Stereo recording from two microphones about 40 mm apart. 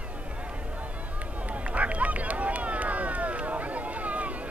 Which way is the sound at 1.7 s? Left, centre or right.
Right.